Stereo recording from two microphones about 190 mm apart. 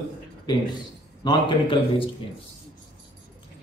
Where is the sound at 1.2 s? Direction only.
25° left (ahead or behind).